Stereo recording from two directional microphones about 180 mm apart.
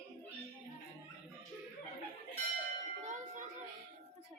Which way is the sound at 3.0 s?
45° right (ahead or behind).